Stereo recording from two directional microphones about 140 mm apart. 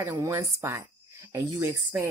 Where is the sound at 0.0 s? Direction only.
20° right (ahead or behind).